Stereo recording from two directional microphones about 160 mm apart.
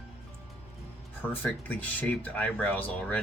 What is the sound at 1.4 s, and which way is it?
Speech, 10° left (ahead or behind).